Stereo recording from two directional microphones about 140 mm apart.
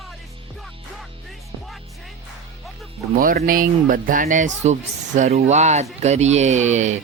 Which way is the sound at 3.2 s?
80° right.